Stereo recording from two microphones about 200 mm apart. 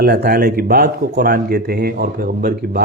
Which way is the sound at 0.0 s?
50° right (ahead or behind).